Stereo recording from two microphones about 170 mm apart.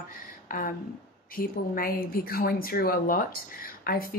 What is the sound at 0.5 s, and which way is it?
Speech, 55° left (ahead or behind).